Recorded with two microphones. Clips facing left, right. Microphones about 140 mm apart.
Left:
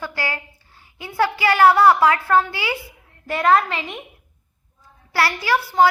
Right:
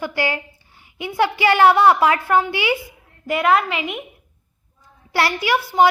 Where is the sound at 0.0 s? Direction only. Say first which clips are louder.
Right 5 dB; 20° right (ahead or behind).